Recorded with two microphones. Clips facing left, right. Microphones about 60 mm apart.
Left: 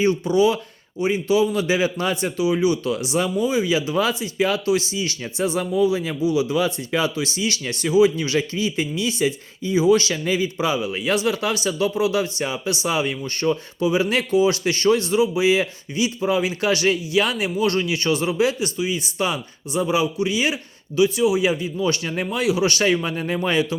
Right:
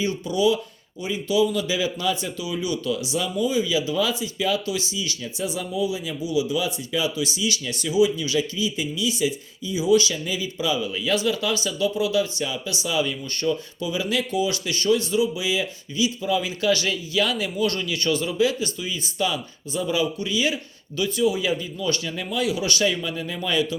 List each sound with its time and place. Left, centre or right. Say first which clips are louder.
0.0 s a man's voice: left 4 dB; left
2.4 s a man's voice: left 8 dB; left
22.1 s a man's voice: left 4 dB; left